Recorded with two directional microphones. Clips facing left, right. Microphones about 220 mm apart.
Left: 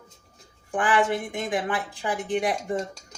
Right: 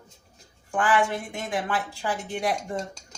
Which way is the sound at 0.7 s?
15° left (ahead or behind).